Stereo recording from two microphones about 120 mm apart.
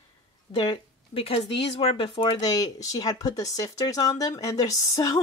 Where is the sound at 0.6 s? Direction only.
45° left (ahead or behind).